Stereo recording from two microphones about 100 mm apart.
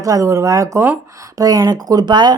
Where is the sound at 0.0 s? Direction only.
35° right (ahead or behind).